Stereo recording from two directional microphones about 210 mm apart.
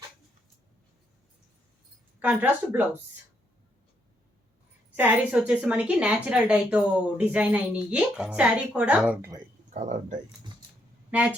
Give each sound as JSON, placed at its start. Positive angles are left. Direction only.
{"t": 2.1, "sound": "speech", "side_deg": -10}
{"t": 4.9, "sound": "a woman's voice", "side_deg": -5}
{"t": 9.7, "sound": "speech", "side_deg": -35}